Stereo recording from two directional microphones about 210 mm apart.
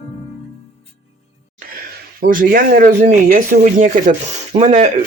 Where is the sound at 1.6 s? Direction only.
45° right (ahead or behind).